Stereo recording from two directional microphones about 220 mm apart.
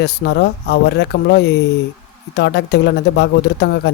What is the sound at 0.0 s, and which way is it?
Speech, 50° left (ahead or behind).